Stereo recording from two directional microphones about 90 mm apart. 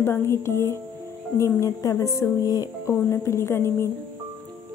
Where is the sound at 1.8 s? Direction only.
40° left (ahead or behind).